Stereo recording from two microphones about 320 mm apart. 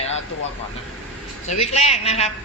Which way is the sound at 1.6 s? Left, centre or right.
Centre.